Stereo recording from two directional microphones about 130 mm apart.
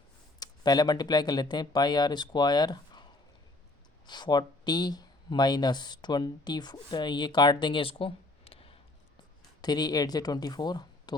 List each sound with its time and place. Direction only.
0.3 s speech: 30° left (ahead or behind); by 8.7 s 45° left (ahead or behind)
9.6 s speech: 30° left (ahead or behind)